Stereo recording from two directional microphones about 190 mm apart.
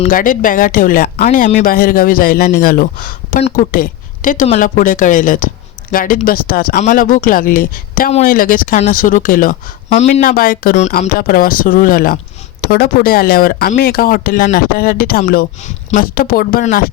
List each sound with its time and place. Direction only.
0.0 s a woman's voice: 45° left (ahead or behind)